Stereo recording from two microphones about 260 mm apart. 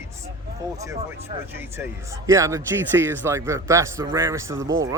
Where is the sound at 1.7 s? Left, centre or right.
Centre.